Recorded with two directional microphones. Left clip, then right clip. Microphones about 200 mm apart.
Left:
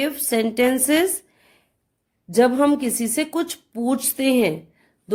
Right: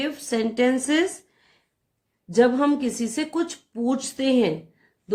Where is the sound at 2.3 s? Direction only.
35° left (ahead or behind).